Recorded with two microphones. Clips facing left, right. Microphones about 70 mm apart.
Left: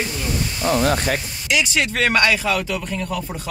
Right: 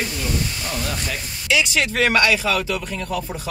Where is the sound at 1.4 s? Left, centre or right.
Centre.